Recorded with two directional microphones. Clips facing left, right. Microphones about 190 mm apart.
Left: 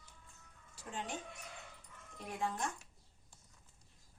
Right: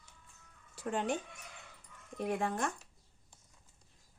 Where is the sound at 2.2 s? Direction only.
65° right (ahead or behind).